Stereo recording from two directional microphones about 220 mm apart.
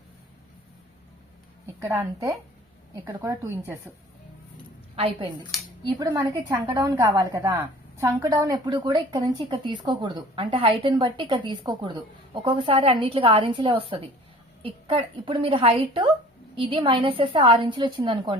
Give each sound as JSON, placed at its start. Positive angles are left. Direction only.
{"t": 1.6, "sound": "a woman's voice", "side_deg": -10}
{"t": 4.9, "sound": "a woman's voice", "side_deg": -25}
{"t": 6.0, "sound": "a woman's voice", "side_deg": -10}